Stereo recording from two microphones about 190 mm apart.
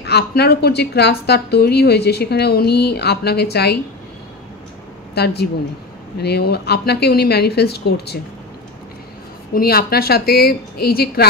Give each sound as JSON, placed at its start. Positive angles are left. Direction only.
{"t": 0.0, "sound": "a woman's voice", "side_deg": 60}
{"t": 5.1, "sound": "a woman's voice", "side_deg": 60}
{"t": 9.5, "sound": "a woman's voice", "side_deg": 55}